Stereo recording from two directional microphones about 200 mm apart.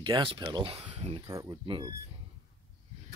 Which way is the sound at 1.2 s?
15° right (ahead or behind).